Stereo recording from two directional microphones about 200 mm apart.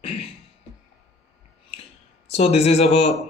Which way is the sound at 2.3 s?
30° left (ahead or behind).